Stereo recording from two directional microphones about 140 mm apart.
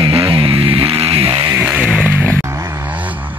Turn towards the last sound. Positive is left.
turn(degrees=-10)  # may be behind; listen again after turning